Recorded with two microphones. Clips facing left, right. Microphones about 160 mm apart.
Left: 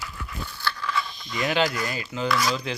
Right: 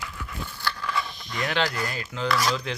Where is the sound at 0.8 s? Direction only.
35° right (ahead or behind).